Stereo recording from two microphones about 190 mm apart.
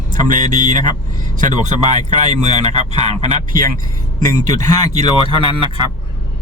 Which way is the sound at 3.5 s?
45° right (ahead or behind).